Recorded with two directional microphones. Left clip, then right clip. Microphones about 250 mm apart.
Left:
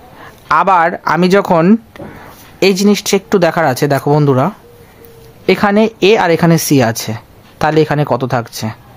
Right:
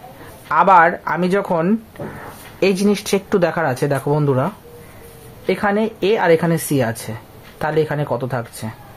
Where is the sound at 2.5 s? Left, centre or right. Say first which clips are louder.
Left 6 dB; left.